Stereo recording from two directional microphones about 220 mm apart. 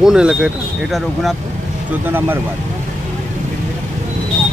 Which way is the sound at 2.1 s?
10° right (ahead or behind).